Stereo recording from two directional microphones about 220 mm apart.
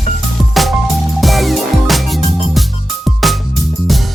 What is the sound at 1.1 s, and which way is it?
Music, centre (ahead or behind).